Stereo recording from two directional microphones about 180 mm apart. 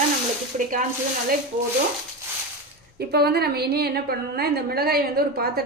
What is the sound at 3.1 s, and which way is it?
A woman's voice, 65° right (ahead or behind).